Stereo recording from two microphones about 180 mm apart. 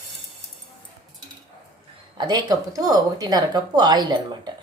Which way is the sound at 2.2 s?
25° right (ahead or behind).